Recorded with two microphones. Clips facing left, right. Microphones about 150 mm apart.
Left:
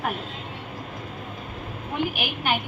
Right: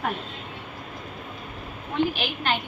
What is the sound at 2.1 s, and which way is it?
Speech, 10° left (ahead or behind).